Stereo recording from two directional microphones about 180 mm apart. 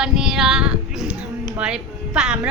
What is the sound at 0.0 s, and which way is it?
Female singing, 5° right (ahead or behind).